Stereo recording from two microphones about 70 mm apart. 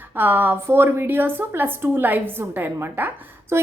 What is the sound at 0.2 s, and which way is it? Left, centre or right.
A woman's voice, right.